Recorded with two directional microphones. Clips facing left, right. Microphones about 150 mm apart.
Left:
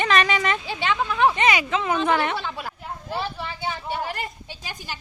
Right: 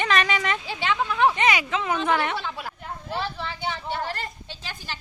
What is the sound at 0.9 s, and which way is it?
Speech, 70° left (ahead or behind).